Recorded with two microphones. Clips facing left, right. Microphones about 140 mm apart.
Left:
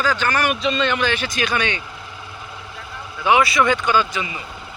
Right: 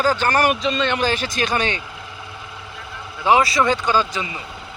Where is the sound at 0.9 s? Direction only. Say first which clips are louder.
Right 1 dB; 40° right (ahead or behind).